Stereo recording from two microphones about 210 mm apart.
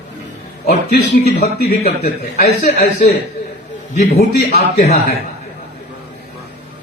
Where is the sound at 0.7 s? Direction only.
50° left (ahead or behind).